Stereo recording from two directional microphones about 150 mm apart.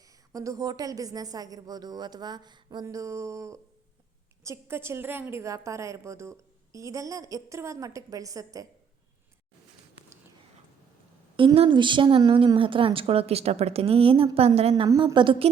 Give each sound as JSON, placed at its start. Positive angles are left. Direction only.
{"t": 0.3, "sound": "speech", "side_deg": -25}
{"t": 11.3, "sound": "a woman's voice", "side_deg": -35}
{"t": 14.8, "sound": "a woman's voice", "side_deg": -30}